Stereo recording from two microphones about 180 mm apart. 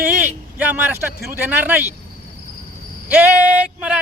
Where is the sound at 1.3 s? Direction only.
10° right (ahead or behind).